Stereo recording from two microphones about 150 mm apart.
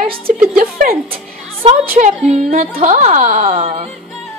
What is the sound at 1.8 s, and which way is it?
Speech, 55° right (ahead or behind).